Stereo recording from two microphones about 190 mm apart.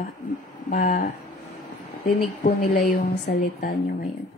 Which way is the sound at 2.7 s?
40° left (ahead or behind).